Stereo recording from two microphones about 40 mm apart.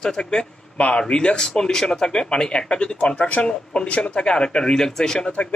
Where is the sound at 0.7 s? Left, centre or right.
Left.